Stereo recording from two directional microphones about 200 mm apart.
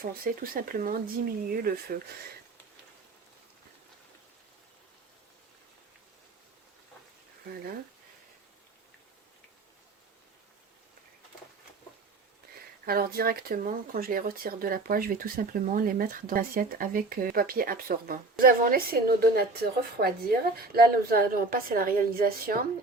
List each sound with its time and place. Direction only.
0.0 s speech: 45° right (ahead or behind)
12.8 s speech: 50° right (ahead or behind)